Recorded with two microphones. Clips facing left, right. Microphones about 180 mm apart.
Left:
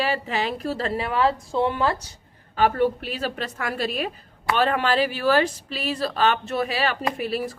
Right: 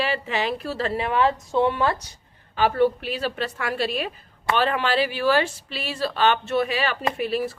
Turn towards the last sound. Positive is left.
turn(degrees=40)  # may be behind; listen again after turning